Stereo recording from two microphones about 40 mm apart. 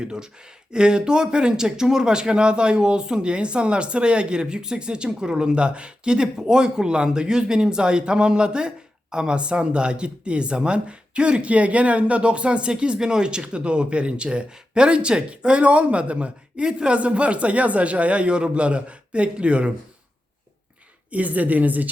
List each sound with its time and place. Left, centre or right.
0.0 s a man's voice: centre
21.1 s a woman's voice: right